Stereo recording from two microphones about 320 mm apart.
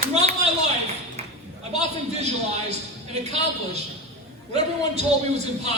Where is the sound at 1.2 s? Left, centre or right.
Centre.